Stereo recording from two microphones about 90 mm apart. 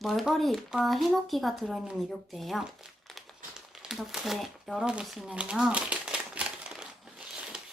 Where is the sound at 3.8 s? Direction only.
5° right (ahead or behind).